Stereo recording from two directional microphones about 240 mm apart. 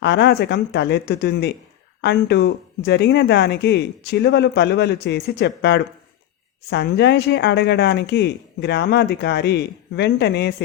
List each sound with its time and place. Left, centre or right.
0.0 s speech: left